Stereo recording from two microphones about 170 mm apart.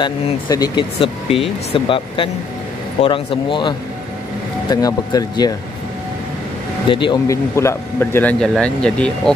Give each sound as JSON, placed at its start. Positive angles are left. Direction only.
{"t": 0.0, "sound": "speech", "side_deg": 25}
{"t": 6.9, "sound": "speech", "side_deg": 30}
{"t": 7.2, "sound": "speech", "side_deg": 15}